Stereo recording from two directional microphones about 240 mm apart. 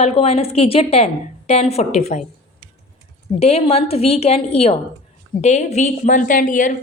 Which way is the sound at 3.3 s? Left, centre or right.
Left.